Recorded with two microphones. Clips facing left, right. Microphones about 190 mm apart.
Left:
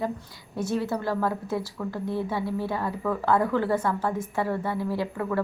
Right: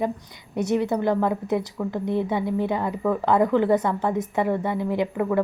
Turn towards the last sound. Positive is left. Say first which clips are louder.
# right 5 dB
turn(degrees=-20)  # may be behind; listen again after turning